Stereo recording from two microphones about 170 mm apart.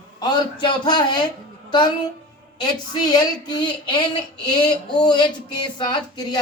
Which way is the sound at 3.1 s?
25° left (ahead or behind).